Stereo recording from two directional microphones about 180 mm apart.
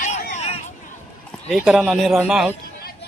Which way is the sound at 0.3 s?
35° left (ahead or behind).